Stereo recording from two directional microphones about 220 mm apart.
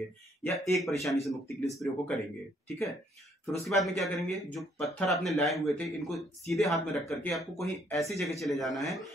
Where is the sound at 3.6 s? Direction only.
Centre (ahead or behind).